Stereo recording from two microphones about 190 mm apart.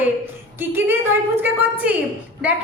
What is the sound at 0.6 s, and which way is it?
A woman's voice, 10° right (ahead or behind).